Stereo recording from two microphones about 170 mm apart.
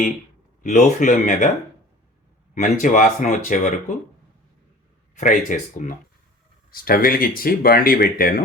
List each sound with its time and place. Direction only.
0.6 s speech: 45° left (ahead or behind)
2.6 s speech: 50° left (ahead or behind)
5.1 s speech: 50° left (ahead or behind)